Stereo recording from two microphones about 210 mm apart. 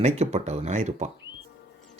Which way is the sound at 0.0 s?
30° right (ahead or behind).